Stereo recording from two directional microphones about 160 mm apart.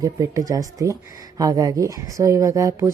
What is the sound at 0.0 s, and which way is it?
Speech, 20° right (ahead or behind).